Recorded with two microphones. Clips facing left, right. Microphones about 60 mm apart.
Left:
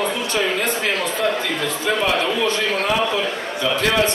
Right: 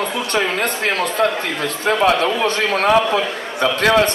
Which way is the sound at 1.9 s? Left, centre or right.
Right.